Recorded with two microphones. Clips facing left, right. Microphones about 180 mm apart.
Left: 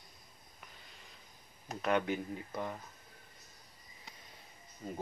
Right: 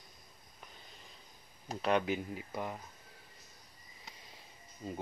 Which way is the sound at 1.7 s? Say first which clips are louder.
Right 1 dB; 30° right (ahead or behind).